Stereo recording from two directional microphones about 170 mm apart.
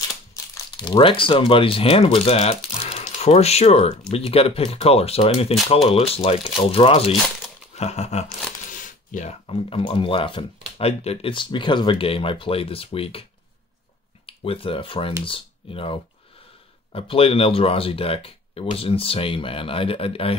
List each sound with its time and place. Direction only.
0.3 s crumpling: 25° left (ahead or behind)
1.5 s speech: 30° left (ahead or behind)
7.7 s a sound: 40° left (ahead or behind)
8.7 s speech: 50° left (ahead or behind)